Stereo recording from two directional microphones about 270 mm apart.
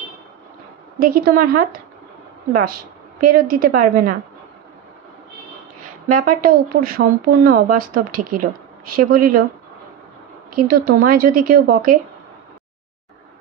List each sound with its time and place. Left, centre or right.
0.9 s speech: right
6.0 s speech: right
10.9 s speech: right